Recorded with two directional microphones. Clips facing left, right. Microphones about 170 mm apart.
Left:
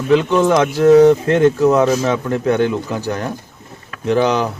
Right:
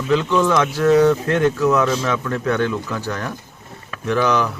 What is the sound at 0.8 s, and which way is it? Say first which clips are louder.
Speech: left 6 dB; 25° left (ahead or behind).